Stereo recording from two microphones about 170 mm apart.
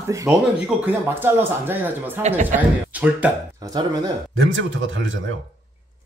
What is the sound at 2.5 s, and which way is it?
Speech, 50° right (ahead or behind).